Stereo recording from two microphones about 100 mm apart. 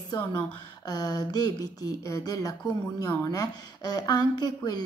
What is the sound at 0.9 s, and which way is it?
A woman's voice, 40° left (ahead or behind).